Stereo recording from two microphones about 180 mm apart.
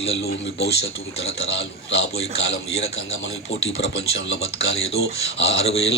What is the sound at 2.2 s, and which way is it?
Speech, 35° left (ahead or behind).